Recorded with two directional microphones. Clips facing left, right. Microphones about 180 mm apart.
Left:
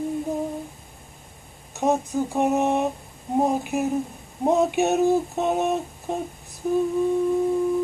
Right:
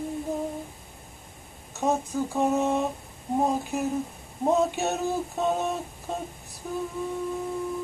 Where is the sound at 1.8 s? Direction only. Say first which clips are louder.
Left 4 dB; 20° left (ahead or behind).